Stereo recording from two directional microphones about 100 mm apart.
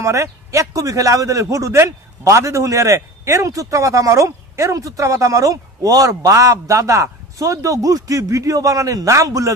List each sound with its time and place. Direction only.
0.0 s a man's voice: 30° right (ahead or behind)